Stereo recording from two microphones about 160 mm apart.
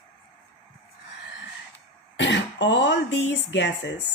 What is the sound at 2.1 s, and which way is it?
Speech, 90° left.